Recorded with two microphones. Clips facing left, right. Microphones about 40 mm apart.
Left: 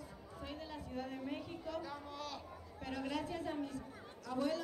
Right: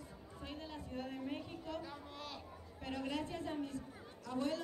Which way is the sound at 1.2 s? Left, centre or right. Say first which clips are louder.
Even; left.